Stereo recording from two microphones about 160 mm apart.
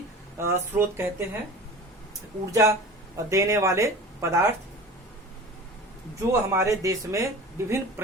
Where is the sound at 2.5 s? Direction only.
20° right (ahead or behind).